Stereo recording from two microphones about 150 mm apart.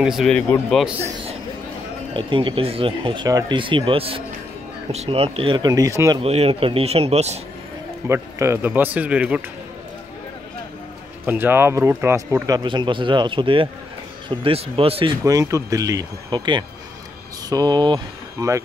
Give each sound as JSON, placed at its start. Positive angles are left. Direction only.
{"t": 0.0, "sound": "speech", "side_deg": 0}
{"t": 2.1, "sound": "speech", "side_deg": -35}
{"t": 6.2, "sound": "speech", "side_deg": -40}
{"t": 8.1, "sound": "speech", "side_deg": -20}
{"t": 11.2, "sound": "speech", "side_deg": -15}
{"t": 15.2, "sound": "speech", "side_deg": -20}